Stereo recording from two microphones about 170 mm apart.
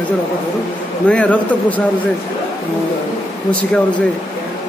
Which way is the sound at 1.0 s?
5° left (ahead or behind).